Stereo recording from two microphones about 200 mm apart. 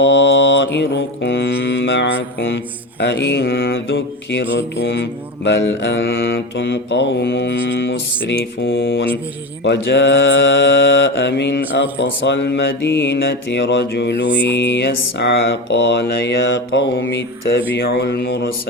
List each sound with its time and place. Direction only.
0.0 s mantra: 65° left (ahead or behind)